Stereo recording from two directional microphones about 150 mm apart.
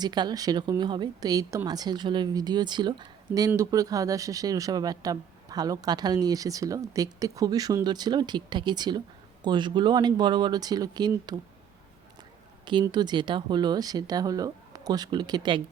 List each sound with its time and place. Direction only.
0.0 s speech: 30° right (ahead or behind)
12.8 s speech: 30° right (ahead or behind)